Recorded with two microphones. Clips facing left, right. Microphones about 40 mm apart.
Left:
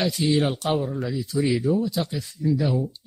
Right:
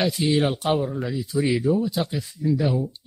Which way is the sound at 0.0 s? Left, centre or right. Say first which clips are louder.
Right 1 dB; centre.